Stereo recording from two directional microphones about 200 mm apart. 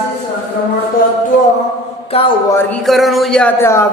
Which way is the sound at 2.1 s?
30° left (ahead or behind).